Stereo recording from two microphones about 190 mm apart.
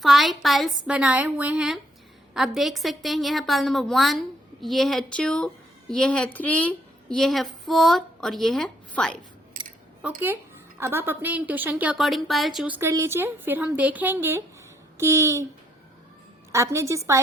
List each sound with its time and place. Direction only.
0.0 s a woman's voice: centre (ahead or behind)
9.5 s keys jangling: 50° right (ahead or behind)
10.0 s a woman's voice: 10° right (ahead or behind)
16.5 s a woman's voice: 15° right (ahead or behind)